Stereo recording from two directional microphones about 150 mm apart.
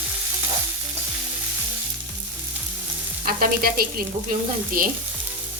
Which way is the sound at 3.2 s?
75° right (ahead or behind).